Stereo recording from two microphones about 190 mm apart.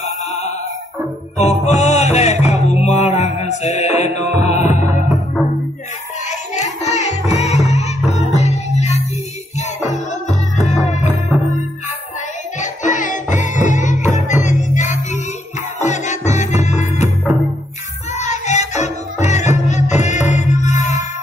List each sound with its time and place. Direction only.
0.0 s music: 35° left (ahead or behind)
6.2 s music: 40° left (ahead or behind)
12.5 s music: 40° left (ahead or behind)
18.1 s music: 40° left (ahead or behind)